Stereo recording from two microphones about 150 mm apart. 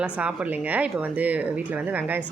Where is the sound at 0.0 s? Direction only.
10° right (ahead or behind).